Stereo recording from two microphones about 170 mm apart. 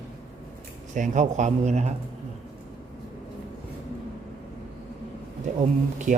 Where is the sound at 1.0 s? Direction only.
45° right (ahead or behind).